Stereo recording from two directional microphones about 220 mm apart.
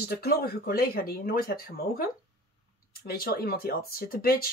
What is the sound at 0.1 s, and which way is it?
Speech, 45° left (ahead or behind).